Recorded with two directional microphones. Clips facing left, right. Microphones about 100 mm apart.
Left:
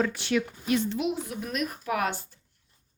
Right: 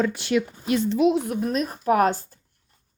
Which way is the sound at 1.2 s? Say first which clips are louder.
Right 10 dB; 50° right (ahead or behind).